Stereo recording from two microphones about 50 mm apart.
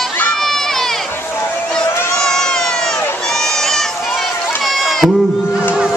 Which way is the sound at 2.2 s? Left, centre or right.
Centre.